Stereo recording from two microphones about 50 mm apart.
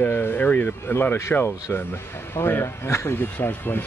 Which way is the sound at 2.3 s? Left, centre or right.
Left.